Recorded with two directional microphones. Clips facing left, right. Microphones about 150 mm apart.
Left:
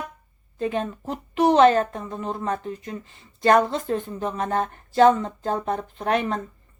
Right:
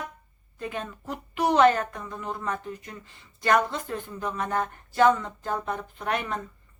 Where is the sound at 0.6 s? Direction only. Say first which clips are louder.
Left 8 dB; 30° left (ahead or behind).